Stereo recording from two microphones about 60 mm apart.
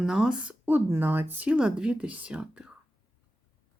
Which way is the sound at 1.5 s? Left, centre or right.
Centre.